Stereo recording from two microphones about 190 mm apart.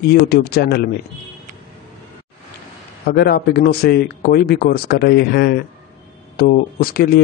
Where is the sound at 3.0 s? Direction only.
55° left (ahead or behind).